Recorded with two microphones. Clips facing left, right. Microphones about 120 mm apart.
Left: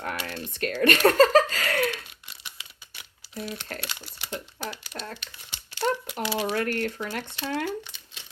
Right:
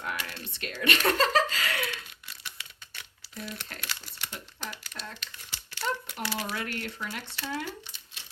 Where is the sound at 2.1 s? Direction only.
25° left (ahead or behind).